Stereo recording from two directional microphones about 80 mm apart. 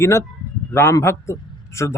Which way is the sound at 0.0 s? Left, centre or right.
Left.